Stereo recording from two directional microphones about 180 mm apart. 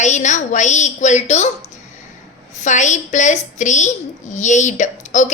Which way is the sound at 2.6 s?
45° left (ahead or behind).